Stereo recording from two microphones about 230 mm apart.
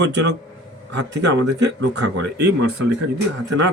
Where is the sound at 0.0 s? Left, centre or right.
Right.